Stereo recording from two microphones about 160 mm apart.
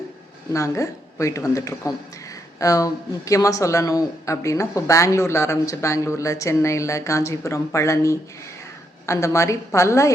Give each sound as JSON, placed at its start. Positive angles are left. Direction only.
{"t": 0.5, "sound": "speech", "side_deg": 20}